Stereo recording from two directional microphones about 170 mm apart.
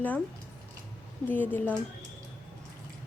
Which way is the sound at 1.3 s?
10° left (ahead or behind).